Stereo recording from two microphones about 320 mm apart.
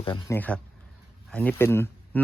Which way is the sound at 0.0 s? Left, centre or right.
Centre.